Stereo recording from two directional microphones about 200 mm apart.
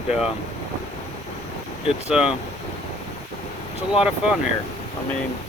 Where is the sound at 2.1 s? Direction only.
5° right (ahead or behind).